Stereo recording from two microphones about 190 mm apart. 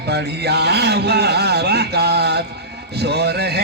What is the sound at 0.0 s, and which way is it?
Speech, 60° right (ahead or behind).